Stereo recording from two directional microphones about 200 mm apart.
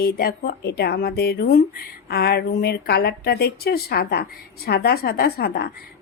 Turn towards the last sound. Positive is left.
turn(degrees=50)  # may be behind; listen again after turning